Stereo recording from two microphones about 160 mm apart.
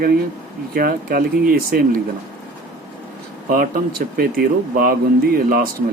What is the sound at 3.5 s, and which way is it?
Speech, 65° right (ahead or behind).